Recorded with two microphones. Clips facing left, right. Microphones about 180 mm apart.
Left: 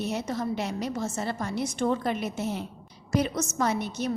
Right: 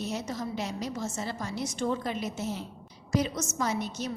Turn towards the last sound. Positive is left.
turn(degrees=60)  # may be behind; listen again after turning